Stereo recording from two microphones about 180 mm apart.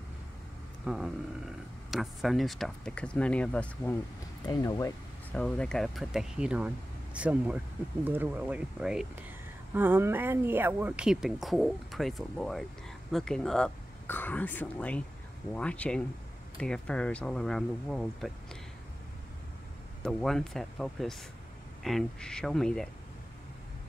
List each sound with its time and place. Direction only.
0.8 s speech: 5° right (ahead or behind)
4.5 s speech: 20° left (ahead or behind)
5.3 s speech: 5° left (ahead or behind)
20.0 s speech: 5° left (ahead or behind)